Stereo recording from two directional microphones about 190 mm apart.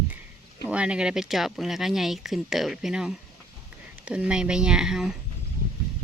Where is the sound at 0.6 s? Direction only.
5° right (ahead or behind).